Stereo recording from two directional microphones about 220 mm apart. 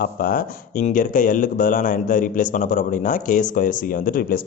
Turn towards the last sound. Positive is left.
turn(degrees=40)  # may be behind; listen again after turning